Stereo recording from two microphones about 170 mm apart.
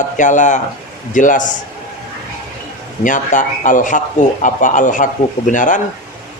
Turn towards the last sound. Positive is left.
turn(degrees=50)  # may be behind; listen again after turning